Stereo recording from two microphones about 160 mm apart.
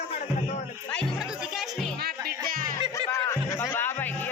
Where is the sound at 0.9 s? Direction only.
Centre (ahead or behind).